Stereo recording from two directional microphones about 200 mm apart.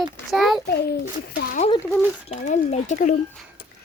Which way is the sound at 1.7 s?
15° left (ahead or behind).